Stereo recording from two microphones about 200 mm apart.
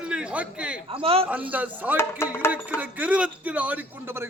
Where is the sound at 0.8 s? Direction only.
30° right (ahead or behind).